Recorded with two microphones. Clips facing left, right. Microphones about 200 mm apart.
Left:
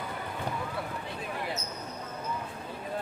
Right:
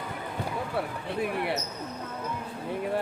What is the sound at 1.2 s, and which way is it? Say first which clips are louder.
Basketball bounce: right 7 dB; 65° right (ahead or behind).